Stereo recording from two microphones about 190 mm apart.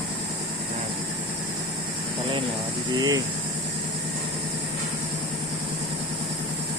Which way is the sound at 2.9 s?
20° right (ahead or behind).